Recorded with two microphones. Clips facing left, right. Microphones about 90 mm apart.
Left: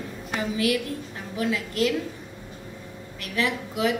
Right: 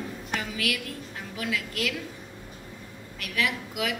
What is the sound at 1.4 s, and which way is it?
Speech, 30° left (ahead or behind).